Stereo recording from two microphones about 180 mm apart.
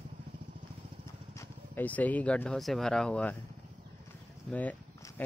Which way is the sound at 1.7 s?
10° left (ahead or behind).